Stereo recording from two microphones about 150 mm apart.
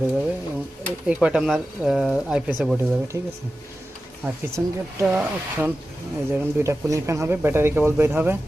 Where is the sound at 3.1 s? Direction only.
15° right (ahead or behind).